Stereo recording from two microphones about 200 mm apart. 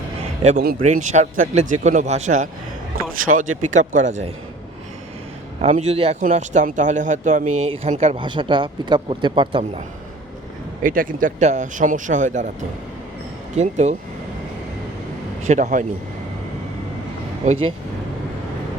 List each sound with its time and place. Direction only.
0.6 s speech: 45° right (ahead or behind)
5.6 s speech: 30° right (ahead or behind)
10.8 s speech: 45° right (ahead or behind)
13.6 s speech: 35° right (ahead or behind)
15.4 s speech: 35° right (ahead or behind)
17.4 s speech: 30° right (ahead or behind)